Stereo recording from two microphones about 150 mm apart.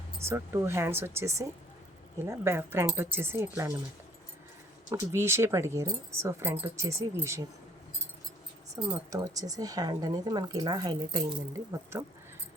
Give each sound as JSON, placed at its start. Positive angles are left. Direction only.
{"t": 0.2, "sound": "speech", "side_deg": -15}
{"t": 4.9, "sound": "speech", "side_deg": -15}
{"t": 9.0, "sound": "speech", "side_deg": -25}